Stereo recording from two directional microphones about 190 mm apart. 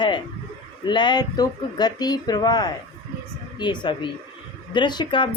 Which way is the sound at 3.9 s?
25° left (ahead or behind).